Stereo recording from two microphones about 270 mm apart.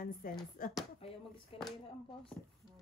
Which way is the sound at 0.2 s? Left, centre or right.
Left.